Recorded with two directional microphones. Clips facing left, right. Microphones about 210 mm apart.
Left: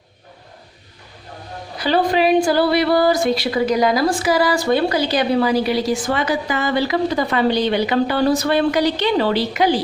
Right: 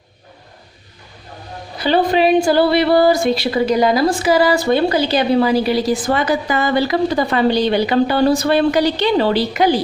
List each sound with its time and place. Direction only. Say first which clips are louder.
1.8 s a woman's voice: right 2 dB; 25° right (ahead or behind); by 6.9 s 45° right (ahead or behind)
7.2 s a woman's voice: right 2 dB; 30° right (ahead or behind)